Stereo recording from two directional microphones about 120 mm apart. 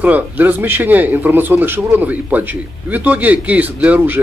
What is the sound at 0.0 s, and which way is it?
A man's voice, 15° right (ahead or behind).